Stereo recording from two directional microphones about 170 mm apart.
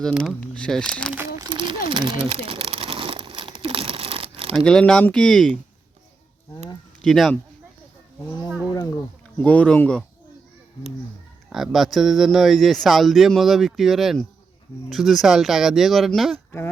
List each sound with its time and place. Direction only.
0.0 s speech: centre (ahead or behind)
1.4 s crumpling: 30° right (ahead or behind)
4.5 s speech: 5° left (ahead or behind)
7.0 s speech: centre (ahead or behind)
9.4 s speech: 10° left (ahead or behind)
11.4 s speech: centre (ahead or behind)